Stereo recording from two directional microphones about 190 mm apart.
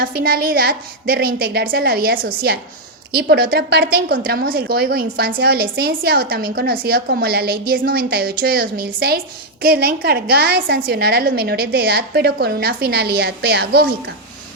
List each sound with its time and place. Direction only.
0.0 s a woman's voice: 55° right (ahead or behind)